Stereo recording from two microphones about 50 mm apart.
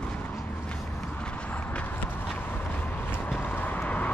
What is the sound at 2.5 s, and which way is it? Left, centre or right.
Vehicle, left.